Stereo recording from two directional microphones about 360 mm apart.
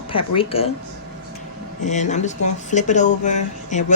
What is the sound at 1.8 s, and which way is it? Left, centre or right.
Speech, centre.